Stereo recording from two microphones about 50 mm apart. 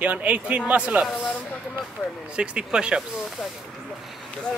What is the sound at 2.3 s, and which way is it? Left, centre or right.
Speech, right.